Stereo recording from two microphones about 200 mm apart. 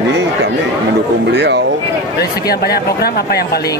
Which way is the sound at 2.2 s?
50° left (ahead or behind).